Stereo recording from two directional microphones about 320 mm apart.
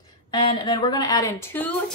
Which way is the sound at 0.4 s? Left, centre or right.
Centre.